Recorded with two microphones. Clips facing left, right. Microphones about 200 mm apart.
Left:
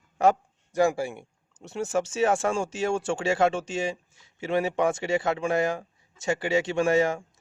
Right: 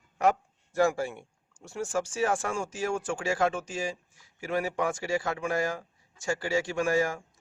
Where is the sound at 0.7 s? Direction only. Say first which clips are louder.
Left 2 dB; 15° left (ahead or behind).